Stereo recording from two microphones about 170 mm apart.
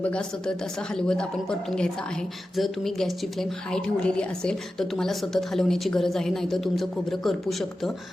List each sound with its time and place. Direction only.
0.0 s a woman's voice: 5° left (ahead or behind)